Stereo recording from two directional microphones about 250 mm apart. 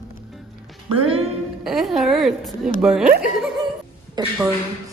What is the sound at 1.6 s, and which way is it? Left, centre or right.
Speech, centre.